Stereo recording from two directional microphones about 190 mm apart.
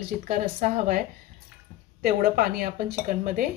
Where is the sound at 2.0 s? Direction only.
50° right (ahead or behind).